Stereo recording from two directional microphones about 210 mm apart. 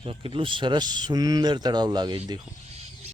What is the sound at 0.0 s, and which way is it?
Speech, 25° right (ahead or behind).